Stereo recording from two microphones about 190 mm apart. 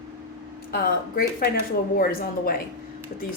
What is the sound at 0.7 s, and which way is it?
Speech, 55° left (ahead or behind).